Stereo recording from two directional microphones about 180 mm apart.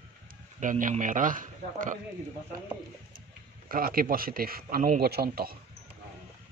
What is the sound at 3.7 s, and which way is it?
A man's voice, 55° right (ahead or behind).